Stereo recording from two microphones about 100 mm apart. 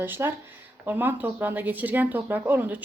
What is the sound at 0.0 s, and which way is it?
Speech, 20° right (ahead or behind).